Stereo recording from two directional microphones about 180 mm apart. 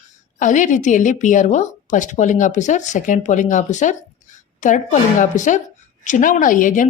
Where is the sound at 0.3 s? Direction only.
45° left (ahead or behind).